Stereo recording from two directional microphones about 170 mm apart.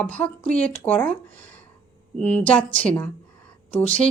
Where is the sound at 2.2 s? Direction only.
5° left (ahead or behind).